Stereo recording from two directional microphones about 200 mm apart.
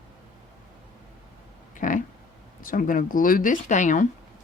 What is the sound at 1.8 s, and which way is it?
Speech, 40° left (ahead or behind).